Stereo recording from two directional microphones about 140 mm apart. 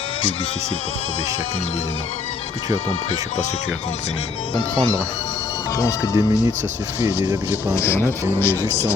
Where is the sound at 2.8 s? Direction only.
55° left (ahead or behind).